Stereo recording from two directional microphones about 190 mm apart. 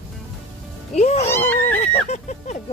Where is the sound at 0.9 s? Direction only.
35° left (ahead or behind).